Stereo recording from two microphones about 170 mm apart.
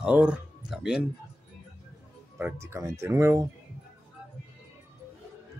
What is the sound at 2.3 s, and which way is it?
Speech, 15° right (ahead or behind).